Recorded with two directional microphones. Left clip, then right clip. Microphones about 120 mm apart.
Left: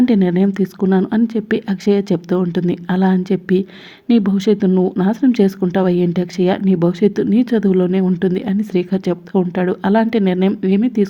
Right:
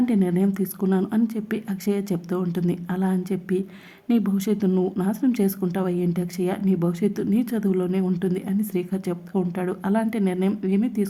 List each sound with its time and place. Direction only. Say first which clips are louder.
0.0 s a woman's voice: left 8 dB; 35° left (ahead or behind)